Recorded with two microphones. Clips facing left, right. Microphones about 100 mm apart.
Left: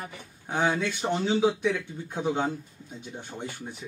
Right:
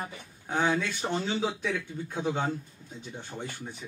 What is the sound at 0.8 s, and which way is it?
Speech, 15° left (ahead or behind).